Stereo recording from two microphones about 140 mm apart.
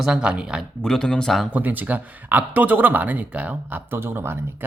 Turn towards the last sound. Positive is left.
turn(degrees=-15)  # may be behind; listen again after turning